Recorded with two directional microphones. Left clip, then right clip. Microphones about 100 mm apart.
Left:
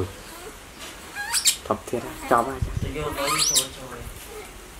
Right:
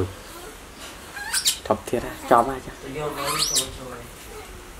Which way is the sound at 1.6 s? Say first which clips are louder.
Right 3 dB; 15° right (ahead or behind).